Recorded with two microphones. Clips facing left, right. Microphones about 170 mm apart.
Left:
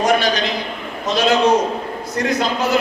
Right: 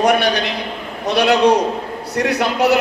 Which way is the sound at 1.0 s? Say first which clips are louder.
Right 2 dB; 65° right (ahead or behind).